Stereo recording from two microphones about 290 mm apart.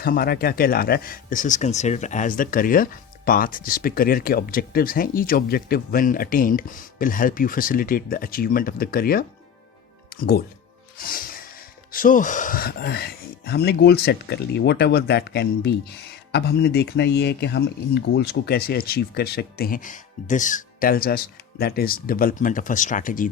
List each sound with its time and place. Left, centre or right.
0.0 s speech: left
10.9 s music: left
11.9 s speech: left